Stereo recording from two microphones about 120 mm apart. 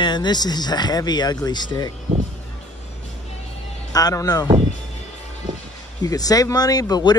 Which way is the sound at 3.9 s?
30° left (ahead or behind).